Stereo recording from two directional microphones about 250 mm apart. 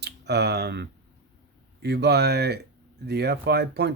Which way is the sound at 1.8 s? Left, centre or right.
Right.